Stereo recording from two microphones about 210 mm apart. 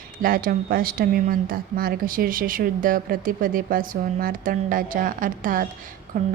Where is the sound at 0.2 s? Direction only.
40° right (ahead or behind).